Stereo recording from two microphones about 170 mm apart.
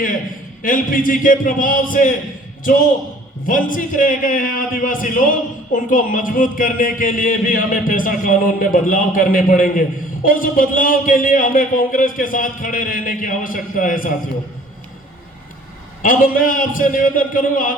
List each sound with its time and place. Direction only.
0.6 s a man's voice: 55° left (ahead or behind)
3.4 s a man's voice: 55° left (ahead or behind)
16.0 s a man's voice: 55° left (ahead or behind)